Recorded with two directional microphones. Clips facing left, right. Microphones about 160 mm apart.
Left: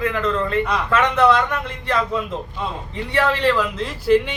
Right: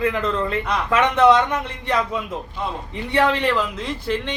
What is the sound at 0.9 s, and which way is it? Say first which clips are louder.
Speech: right 2 dB; 20° right (ahead or behind).